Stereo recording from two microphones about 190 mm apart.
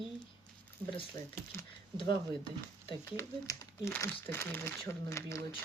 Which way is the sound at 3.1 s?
15° left (ahead or behind).